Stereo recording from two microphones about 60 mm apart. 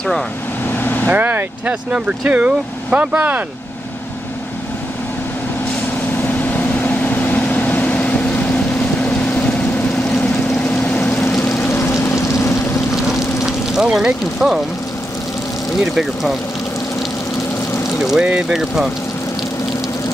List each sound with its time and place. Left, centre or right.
0.7 s vehicle: left
1.0 s speech: right
6.2 s vehicle: left
11.3 s vehicle: left
12.3 s a sound: left
13.7 s speech: centre
15.8 s speech: centre
18.0 s speech: centre